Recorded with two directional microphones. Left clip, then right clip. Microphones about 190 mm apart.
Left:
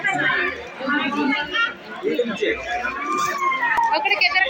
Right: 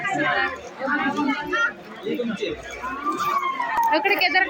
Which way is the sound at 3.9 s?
70° right (ahead or behind).